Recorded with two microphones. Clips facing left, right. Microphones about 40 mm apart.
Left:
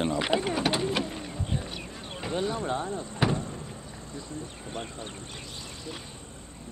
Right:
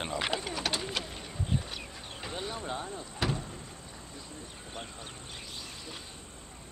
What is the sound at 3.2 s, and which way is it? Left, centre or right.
Vehicle, left.